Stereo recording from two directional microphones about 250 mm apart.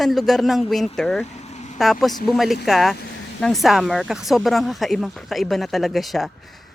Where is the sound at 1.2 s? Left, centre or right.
Left.